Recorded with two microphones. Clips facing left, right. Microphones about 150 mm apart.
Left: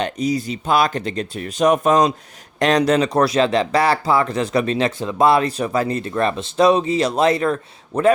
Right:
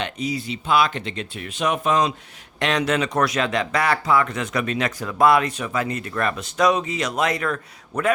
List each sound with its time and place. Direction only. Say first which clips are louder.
0.0 s speech: left 6 dB; 40° left (ahead or behind)